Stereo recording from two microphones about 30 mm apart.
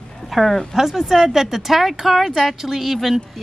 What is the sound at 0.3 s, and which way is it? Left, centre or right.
Speech, centre.